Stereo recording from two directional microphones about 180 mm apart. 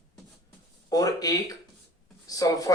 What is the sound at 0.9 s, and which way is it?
Speech, 20° left (ahead or behind).